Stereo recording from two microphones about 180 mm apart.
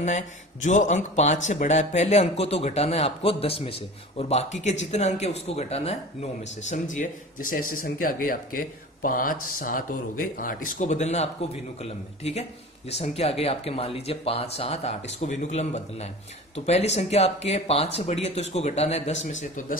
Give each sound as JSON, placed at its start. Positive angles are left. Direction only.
{"t": 0.0, "sound": "speech", "side_deg": 40}